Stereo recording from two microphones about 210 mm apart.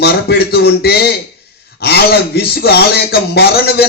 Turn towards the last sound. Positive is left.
turn(degrees=50)  # may be behind; listen again after turning